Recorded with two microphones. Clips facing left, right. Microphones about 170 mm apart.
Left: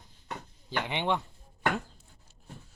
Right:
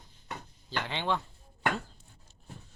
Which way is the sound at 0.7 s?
15° left (ahead or behind).